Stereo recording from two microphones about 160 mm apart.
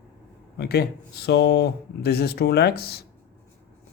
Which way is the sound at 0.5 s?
85° left.